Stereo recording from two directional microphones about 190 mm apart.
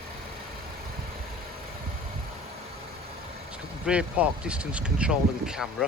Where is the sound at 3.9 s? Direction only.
5° right (ahead or behind).